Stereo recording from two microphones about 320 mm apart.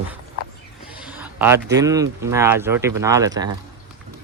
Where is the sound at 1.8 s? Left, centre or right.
Centre.